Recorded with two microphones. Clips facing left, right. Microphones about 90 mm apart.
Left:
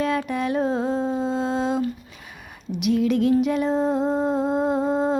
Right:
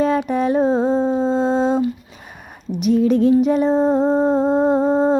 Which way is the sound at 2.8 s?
35° right (ahead or behind).